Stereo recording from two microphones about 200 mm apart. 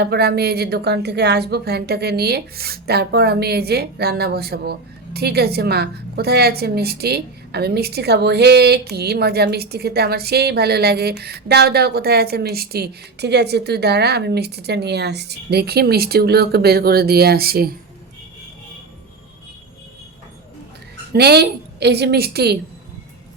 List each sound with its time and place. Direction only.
0.0 s a woman's voice: 55° right (ahead or behind)
21.1 s a woman's voice: 55° right (ahead or behind)